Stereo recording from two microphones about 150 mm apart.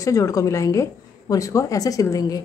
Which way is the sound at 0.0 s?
20° left (ahead or behind).